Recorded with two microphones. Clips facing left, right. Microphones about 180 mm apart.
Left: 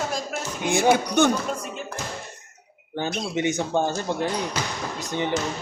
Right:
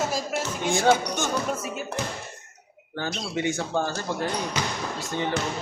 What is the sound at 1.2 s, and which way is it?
Speech, 60° left (ahead or behind).